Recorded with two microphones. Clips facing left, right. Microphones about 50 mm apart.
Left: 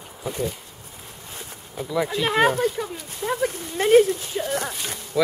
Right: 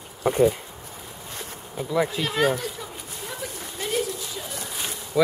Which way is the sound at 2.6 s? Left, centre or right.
Left.